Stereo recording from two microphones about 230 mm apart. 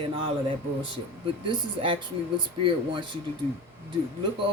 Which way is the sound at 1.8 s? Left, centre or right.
Right.